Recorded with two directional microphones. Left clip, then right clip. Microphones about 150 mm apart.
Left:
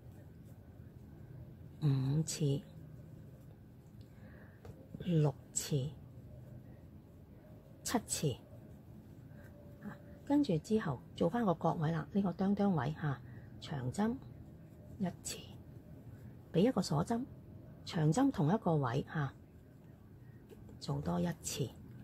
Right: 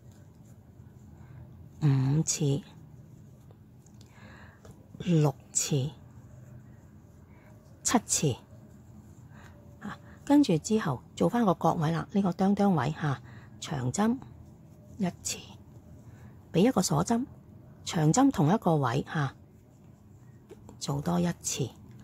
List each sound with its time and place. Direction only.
1.8 s a sound: 35° right (ahead or behind)
2.2 s speech: 25° right (ahead or behind)
4.9 s a woman's voice: 30° right (ahead or behind)
7.8 s a woman's voice: 30° right (ahead or behind)
9.8 s speech: 40° right (ahead or behind)
16.5 s speech: 30° right (ahead or behind)
20.8 s speech: 30° right (ahead or behind)